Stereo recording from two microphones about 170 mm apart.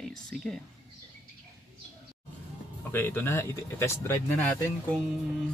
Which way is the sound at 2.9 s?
10° left (ahead or behind).